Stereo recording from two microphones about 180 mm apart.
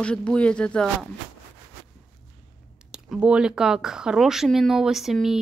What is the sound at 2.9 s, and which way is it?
Speech, 5° right (ahead or behind).